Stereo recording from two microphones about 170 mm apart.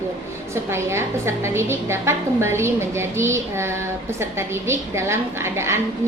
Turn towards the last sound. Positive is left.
turn(degrees=-15)  # may be behind; listen again after turning